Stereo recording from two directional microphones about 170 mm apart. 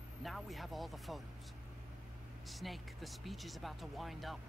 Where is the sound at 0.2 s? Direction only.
Centre (ahead or behind).